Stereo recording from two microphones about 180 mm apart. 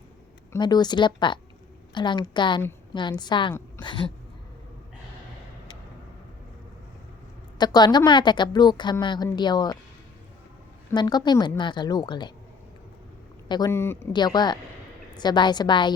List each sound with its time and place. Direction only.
0.5 s a woman's voice: 25° left (ahead or behind)
3.8 s a sound: 25° left (ahead or behind)
7.6 s a woman's voice: 25° left (ahead or behind)
10.9 s a woman's voice: 25° left (ahead or behind)
13.5 s a woman's voice: 20° left (ahead or behind)